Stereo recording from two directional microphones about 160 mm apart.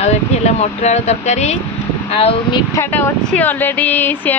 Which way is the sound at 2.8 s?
15° left (ahead or behind).